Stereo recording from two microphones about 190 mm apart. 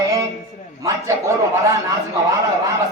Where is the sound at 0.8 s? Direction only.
15° right (ahead or behind).